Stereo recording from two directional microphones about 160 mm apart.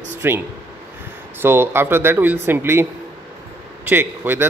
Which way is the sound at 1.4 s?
15° right (ahead or behind).